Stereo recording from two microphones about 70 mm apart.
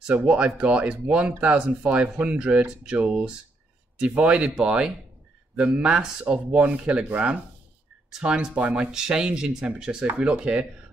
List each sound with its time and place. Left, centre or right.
0.1 s speech: centre